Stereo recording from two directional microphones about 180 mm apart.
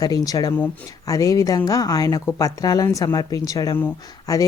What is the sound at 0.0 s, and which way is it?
Speech, 20° left (ahead or behind).